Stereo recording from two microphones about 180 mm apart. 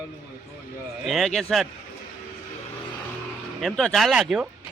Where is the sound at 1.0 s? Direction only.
Centre (ahead or behind).